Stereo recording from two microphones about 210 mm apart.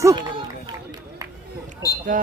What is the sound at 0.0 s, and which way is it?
Run, 15° right (ahead or behind).